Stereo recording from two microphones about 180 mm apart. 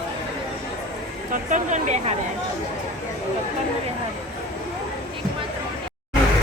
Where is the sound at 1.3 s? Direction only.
45° right (ahead or behind).